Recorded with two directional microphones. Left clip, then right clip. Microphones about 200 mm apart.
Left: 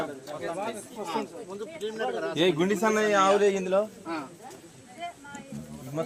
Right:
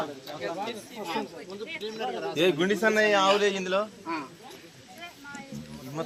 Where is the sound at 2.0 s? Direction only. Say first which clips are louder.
Left 3 dB; 25° right (ahead or behind).